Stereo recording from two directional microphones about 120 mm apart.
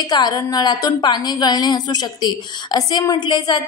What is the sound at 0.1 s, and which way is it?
A woman's voice, 35° left (ahead or behind).